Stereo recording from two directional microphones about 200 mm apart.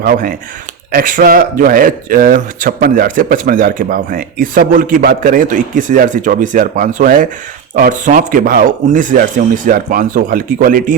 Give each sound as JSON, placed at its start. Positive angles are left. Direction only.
{"t": 0.0, "sound": "speech", "side_deg": -45}